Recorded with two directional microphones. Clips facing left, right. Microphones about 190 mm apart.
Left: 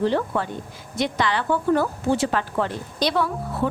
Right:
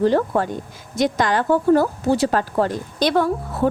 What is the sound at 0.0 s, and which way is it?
A woman's voice, 45° right (ahead or behind).